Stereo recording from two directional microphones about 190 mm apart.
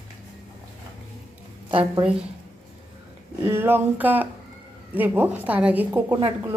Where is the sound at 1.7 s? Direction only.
30° right (ahead or behind).